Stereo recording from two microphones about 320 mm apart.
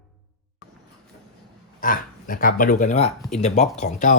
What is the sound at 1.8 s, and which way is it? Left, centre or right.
Speech, left.